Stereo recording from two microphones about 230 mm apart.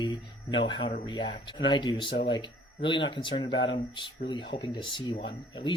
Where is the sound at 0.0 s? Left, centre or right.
Left.